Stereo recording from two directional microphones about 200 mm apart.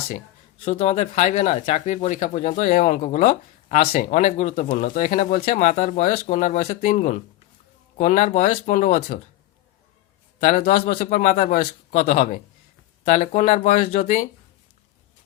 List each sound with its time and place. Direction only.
0.6 s speech: 35° left (ahead or behind)
10.4 s speech: 40° left (ahead or behind)